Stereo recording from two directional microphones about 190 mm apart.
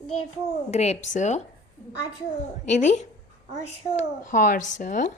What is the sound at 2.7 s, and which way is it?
A woman's voice, 40° left (ahead or behind).